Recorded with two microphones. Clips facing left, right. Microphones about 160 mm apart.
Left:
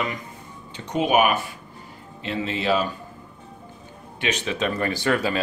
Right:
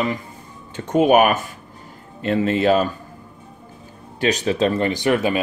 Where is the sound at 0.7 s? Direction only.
50° right (ahead or behind).